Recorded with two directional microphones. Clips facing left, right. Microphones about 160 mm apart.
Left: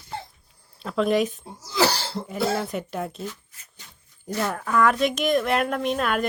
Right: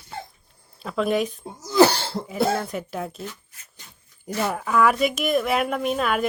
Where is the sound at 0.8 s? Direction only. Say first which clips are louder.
Left 1 dB; centre (ahead or behind).